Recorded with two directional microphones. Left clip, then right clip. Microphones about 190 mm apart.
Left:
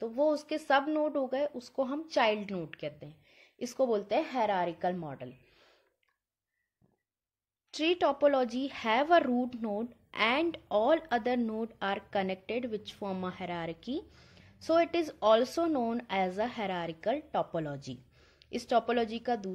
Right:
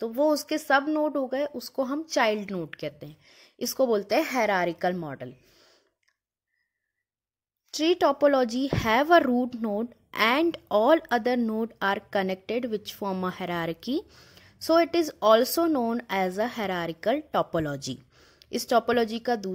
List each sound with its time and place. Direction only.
0.0 s a woman's voice: 50° right (ahead or behind)
7.7 s a woman's voice: 45° right (ahead or behind)